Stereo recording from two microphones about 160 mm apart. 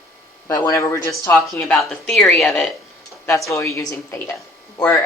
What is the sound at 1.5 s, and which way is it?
Speech, centre (ahead or behind).